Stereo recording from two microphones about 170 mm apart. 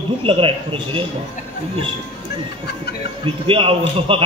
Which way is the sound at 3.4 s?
30° right (ahead or behind).